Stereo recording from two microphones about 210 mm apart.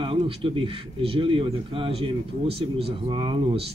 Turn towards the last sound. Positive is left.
turn(degrees=-25)  # may be behind; listen again after turning